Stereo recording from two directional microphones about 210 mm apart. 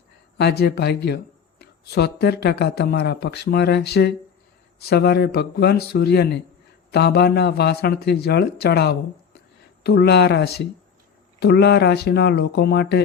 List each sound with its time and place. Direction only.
0.3 s speech: 50° left (ahead or behind)